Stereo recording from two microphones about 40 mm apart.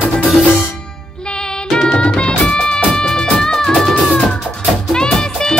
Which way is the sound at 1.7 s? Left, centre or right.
Left.